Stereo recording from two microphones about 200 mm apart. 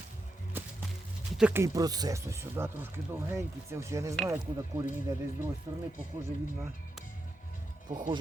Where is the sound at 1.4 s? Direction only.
10° right (ahead or behind).